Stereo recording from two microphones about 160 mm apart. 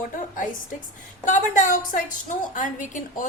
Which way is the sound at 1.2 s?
50° left (ahead or behind).